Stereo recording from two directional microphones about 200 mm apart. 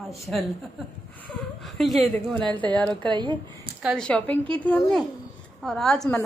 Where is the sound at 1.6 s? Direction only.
Centre (ahead or behind).